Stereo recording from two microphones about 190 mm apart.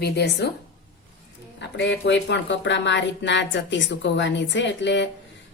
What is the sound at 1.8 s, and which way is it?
A woman's voice, 70° left (ahead or behind).